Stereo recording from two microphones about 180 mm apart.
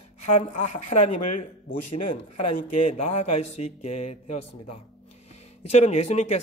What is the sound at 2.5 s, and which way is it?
A man's voice, 40° left (ahead or behind).